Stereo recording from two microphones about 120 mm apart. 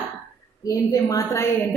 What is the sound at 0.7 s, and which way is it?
Speech, 30° left (ahead or behind).